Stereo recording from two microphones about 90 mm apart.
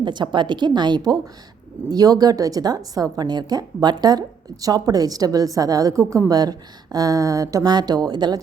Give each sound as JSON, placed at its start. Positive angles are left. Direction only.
{"t": 0.0, "sound": "a woman's voice", "side_deg": -60}